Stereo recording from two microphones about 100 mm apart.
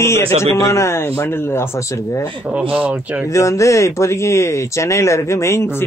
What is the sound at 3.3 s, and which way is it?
Speech, 30° left (ahead or behind).